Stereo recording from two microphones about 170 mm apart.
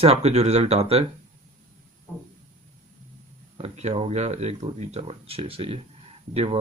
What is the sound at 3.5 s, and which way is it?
Speech, 35° right (ahead or behind).